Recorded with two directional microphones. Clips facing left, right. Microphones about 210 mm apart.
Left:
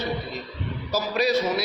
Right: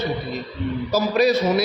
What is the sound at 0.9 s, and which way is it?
Speech, 50° right (ahead or behind).